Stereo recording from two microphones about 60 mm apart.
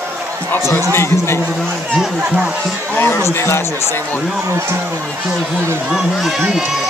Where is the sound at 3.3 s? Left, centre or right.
Left.